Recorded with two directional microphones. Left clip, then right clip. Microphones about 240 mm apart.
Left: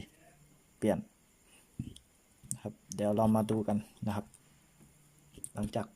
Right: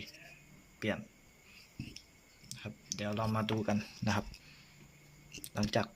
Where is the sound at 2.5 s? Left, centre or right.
Left.